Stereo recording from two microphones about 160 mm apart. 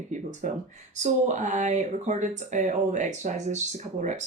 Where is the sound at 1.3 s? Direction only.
50° right (ahead or behind).